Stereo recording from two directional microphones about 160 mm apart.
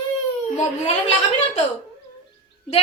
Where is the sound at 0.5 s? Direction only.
45° left (ahead or behind).